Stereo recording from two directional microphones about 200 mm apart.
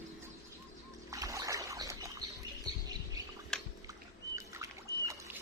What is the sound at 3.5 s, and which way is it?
Bathtub, 5° left (ahead or behind).